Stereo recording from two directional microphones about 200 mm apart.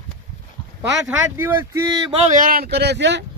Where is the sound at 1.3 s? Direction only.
10° right (ahead or behind).